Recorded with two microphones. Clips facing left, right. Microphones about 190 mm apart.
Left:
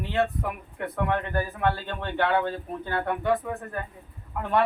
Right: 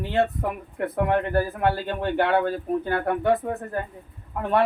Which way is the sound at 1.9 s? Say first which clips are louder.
Right 6 dB; 40° right (ahead or behind).